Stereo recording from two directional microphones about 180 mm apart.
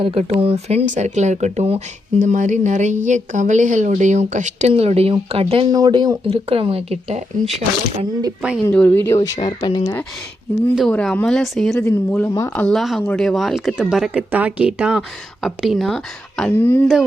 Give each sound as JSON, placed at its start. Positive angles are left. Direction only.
{"t": 0.0, "sound": "speech", "side_deg": -30}
{"t": 8.4, "sound": "speech", "side_deg": -5}
{"t": 8.6, "sound": "speech", "side_deg": 10}
{"t": 10.8, "sound": "speech", "side_deg": 5}
{"t": 11.9, "sound": "speech", "side_deg": 15}
{"t": 12.6, "sound": "speech", "side_deg": 0}